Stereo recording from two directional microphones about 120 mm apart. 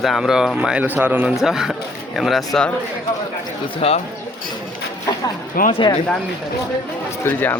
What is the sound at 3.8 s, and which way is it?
Speech, 50° left (ahead or behind).